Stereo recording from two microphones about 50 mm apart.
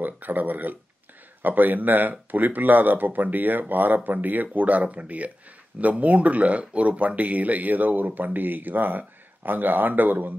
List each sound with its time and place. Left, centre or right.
0.0 s speech: right